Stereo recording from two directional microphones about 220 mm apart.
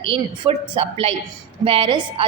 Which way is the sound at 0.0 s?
25° right (ahead or behind).